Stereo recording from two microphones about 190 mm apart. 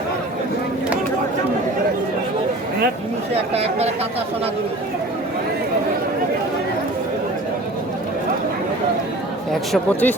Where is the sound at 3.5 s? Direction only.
35° right (ahead or behind).